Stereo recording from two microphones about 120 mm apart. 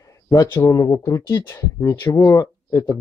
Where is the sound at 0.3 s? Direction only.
30° left (ahead or behind).